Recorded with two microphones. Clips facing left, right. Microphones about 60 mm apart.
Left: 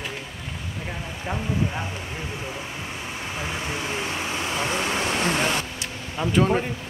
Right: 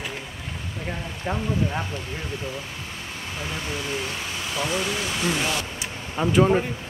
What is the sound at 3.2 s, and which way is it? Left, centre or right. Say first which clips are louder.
Speech: left 1 dB; centre.